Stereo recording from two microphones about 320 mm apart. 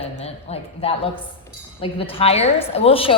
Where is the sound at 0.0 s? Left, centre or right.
Centre.